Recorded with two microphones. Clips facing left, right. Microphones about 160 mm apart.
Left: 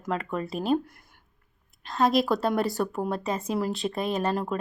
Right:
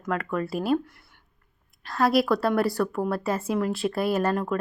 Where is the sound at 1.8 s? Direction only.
20° left (ahead or behind).